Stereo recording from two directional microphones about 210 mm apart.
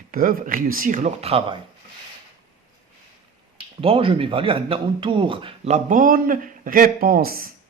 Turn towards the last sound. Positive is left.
turn(degrees=-45)  # may be behind; listen again after turning